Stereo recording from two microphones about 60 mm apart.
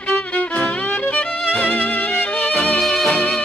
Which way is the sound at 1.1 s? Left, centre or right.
Left.